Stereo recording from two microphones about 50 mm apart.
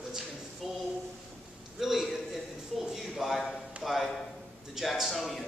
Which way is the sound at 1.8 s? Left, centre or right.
Centre.